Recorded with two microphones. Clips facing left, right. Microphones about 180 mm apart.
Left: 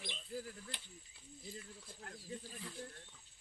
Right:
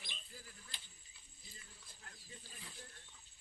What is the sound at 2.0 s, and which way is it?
Wild animals, 60° left (ahead or behind).